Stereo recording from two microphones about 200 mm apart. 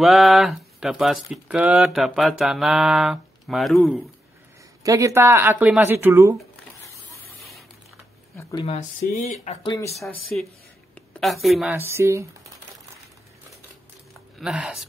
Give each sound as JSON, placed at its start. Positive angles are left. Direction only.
{"t": 0.0, "sound": "speech", "side_deg": 0}
{"t": 4.8, "sound": "speech", "side_deg": -15}
{"t": 8.4, "sound": "speech", "side_deg": 15}
{"t": 9.4, "sound": "speech", "side_deg": 35}
{"t": 9.7, "sound": "speech", "side_deg": 15}
{"t": 10.3, "sound": "speech", "side_deg": 5}
{"t": 14.4, "sound": "speech", "side_deg": -5}